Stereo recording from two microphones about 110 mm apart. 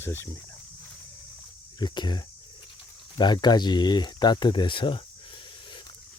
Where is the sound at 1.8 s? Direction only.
40° left (ahead or behind).